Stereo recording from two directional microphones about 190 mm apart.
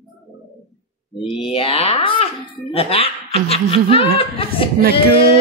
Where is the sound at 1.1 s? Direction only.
30° left (ahead or behind).